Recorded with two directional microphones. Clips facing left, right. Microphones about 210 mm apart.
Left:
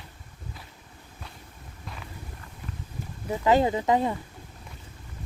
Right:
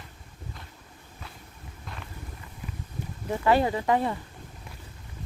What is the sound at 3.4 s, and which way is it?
Speech, 20° left (ahead or behind).